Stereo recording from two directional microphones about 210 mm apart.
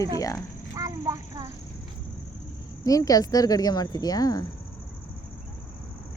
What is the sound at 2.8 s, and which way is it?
Speech, 15° left (ahead or behind).